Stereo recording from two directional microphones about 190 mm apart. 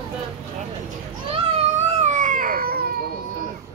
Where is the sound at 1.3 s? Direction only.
35° right (ahead or behind); by 2.9 s 55° right (ahead or behind).